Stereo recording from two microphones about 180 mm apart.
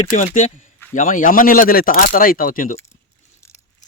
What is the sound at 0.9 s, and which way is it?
Speech, 45° left (ahead or behind).